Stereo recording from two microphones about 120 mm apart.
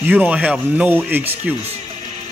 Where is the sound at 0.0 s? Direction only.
15° right (ahead or behind).